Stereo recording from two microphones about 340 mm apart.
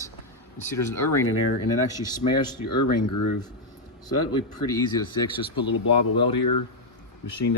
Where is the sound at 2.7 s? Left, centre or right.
Left.